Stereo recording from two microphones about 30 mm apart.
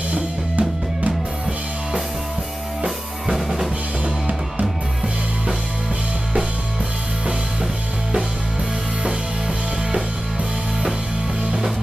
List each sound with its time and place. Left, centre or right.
0.1 s music: right
3.3 s drum kit: centre